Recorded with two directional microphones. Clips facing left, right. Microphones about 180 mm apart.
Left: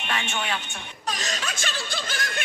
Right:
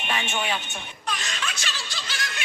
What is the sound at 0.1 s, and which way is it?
Speech, 5° right (ahead or behind).